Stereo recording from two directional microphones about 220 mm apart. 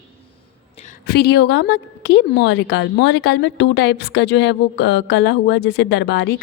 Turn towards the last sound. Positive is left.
turn(degrees=50)  # may be behind; listen again after turning